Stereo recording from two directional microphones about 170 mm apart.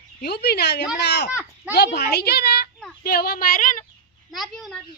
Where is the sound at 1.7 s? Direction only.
75° left (ahead or behind); by 3.8 s 55° left (ahead or behind).